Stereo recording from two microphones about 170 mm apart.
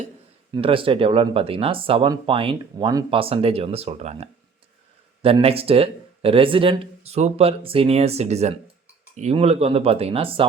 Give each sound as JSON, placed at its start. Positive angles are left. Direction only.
{"t": 0.5, "sound": "speech", "side_deg": -30}